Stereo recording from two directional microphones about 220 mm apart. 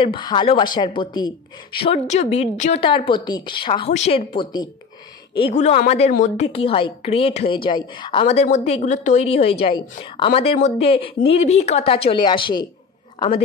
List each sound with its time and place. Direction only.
0.0 s a woman's voice: 20° left (ahead or behind)